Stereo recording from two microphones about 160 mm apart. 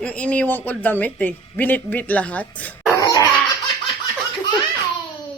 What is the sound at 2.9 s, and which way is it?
Laughter, 25° left (ahead or behind).